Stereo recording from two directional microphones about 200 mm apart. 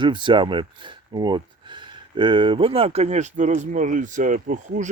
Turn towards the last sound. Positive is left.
turn(degrees=-40)  # may be behind; listen again after turning